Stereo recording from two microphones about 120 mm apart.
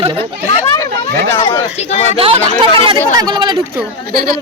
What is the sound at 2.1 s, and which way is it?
Speech, 50° right (ahead or behind).